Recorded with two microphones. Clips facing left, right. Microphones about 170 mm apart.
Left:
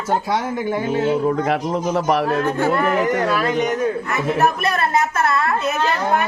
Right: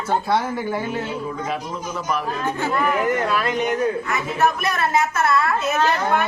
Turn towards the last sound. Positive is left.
turn(degrees=30)  # may be behind; listen again after turning